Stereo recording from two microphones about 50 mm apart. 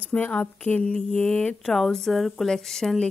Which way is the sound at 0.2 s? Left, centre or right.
Left.